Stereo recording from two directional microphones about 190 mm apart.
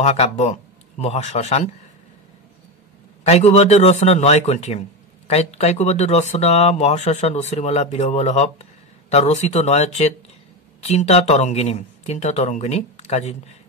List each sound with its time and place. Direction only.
0.0 s a man's voice: 35° left (ahead or behind)
3.3 s speech: 35° left (ahead or behind)